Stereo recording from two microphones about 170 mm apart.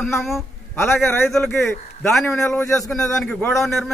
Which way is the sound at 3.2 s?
5° left (ahead or behind).